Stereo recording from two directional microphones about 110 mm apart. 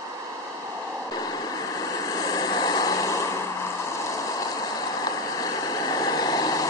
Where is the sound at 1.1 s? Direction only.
35° left (ahead or behind).